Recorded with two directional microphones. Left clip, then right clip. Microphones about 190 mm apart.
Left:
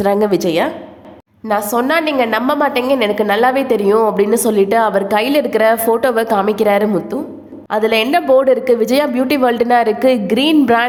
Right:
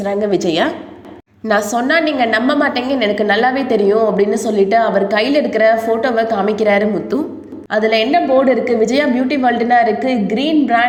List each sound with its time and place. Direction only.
0.0 s a woman's voice: 25° left (ahead or behind)
1.7 s a woman's voice: 15° left (ahead or behind)
8.1 s a woman's voice: 30° left (ahead or behind)